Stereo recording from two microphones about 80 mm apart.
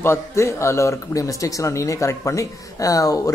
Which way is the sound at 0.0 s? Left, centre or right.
Left.